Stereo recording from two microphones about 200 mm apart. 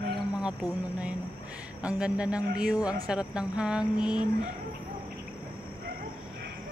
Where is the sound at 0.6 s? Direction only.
20° left (ahead or behind).